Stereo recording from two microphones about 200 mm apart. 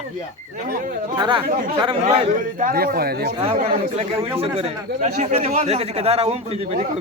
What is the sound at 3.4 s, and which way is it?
A man's voice, 30° right (ahead or behind).